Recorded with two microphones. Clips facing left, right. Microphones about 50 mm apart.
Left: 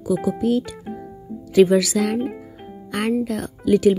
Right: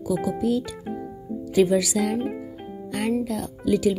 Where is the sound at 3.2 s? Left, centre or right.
Left.